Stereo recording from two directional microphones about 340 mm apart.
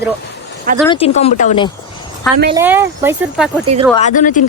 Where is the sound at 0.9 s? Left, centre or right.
Centre.